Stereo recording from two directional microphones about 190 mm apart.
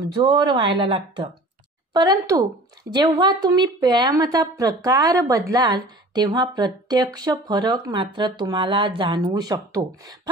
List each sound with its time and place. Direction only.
0.2 s a woman's voice: 25° right (ahead or behind)
2.0 s a woman's voice: 20° right (ahead or behind)